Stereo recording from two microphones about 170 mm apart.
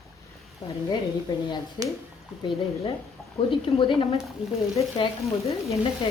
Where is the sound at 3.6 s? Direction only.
30° left (ahead or behind).